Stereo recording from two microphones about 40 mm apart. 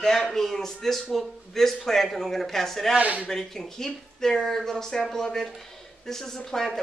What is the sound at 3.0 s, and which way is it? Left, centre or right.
Speech, right.